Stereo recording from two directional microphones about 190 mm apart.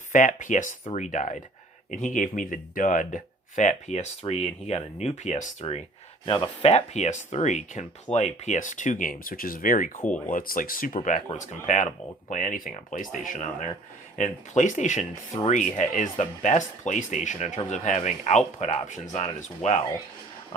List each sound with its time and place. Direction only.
0.1 s speech: 45° left (ahead or behind)